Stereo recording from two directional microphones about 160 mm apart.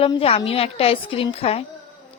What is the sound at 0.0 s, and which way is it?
A woman's voice, 35° left (ahead or behind).